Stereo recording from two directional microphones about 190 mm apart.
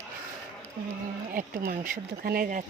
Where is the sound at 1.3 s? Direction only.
45° right (ahead or behind).